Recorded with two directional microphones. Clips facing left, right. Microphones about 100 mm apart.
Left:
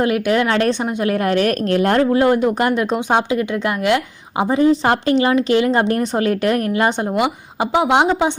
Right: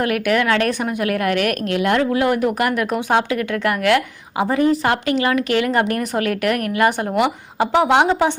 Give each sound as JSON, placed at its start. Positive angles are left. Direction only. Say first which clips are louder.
{"t": 0.0, "sound": "a woman's voice", "louder": "left 2 dB", "side_deg": 25}
{"t": 7.2, "sound": "speech", "louder": "right 1 dB", "side_deg": 15}